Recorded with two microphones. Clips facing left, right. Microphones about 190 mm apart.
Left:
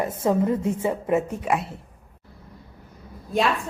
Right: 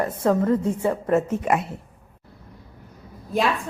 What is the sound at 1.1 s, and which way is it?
Speech, centre (ahead or behind).